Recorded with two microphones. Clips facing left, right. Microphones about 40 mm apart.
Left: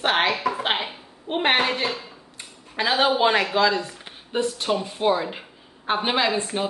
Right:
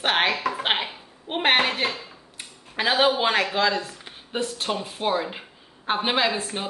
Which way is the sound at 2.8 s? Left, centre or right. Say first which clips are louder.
Left 1 dB; centre.